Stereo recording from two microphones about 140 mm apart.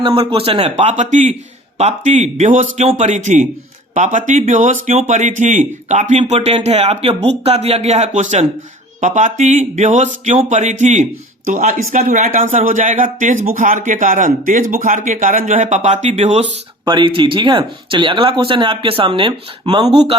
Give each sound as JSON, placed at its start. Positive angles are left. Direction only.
{"t": 0.0, "sound": "speech", "side_deg": -40}
{"t": 11.4, "sound": "speech", "side_deg": -70}
{"t": 16.8, "sound": "speech", "side_deg": -35}